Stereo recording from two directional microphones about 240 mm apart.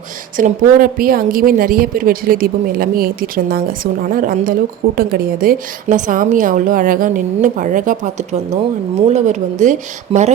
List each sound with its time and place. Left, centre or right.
0.3 s a woman's voice: right